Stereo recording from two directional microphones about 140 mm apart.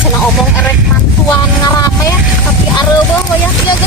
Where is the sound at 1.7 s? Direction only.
25° left (ahead or behind).